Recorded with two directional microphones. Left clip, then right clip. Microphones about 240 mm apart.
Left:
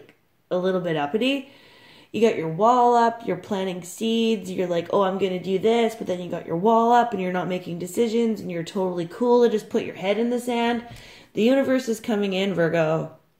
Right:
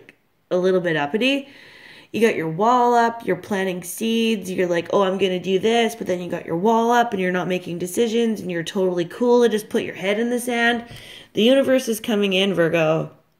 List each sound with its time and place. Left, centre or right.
0.5 s speech: right